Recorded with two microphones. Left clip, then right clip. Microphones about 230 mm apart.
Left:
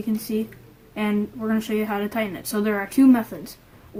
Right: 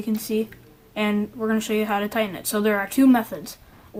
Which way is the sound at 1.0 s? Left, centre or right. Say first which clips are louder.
Right 1 dB; right.